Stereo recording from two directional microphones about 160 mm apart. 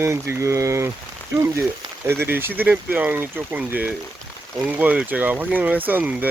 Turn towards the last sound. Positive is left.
turn(degrees=-10)  # may be behind; listen again after turning